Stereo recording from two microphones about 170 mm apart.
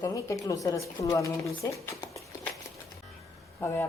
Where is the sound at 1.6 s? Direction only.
20° left (ahead or behind).